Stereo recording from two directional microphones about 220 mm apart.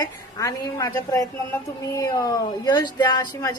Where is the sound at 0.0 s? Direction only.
15° left (ahead or behind).